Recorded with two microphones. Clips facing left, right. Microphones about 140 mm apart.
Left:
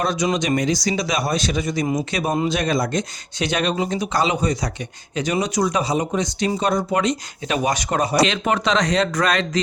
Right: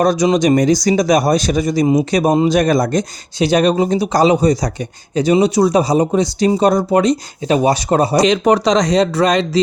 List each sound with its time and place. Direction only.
0.0 s speech: 40° right (ahead or behind)